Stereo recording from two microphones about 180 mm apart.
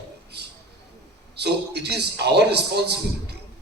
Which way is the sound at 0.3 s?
70° right (ahead or behind).